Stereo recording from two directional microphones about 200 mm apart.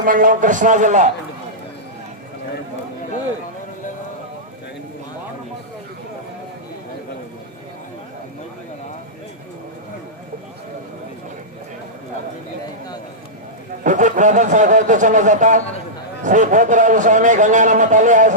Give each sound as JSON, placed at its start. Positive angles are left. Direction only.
{"t": 0.0, "sound": "a man's voice", "side_deg": -45}
{"t": 13.8, "sound": "a man's voice", "side_deg": -40}